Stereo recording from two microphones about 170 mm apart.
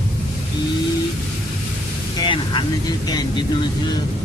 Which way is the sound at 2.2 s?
30° left (ahead or behind).